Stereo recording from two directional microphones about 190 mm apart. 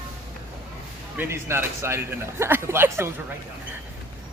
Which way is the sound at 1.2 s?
15° right (ahead or behind).